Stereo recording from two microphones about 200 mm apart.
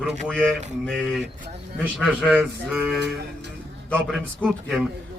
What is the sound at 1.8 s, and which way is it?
A man's voice, centre (ahead or behind).